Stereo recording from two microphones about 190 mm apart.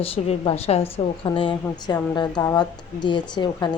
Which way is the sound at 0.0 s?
30° left (ahead or behind).